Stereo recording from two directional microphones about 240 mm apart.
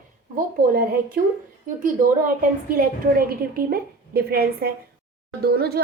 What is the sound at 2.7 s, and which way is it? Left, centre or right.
Speech, right.